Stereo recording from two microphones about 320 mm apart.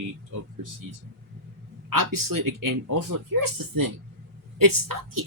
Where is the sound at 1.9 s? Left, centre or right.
Right.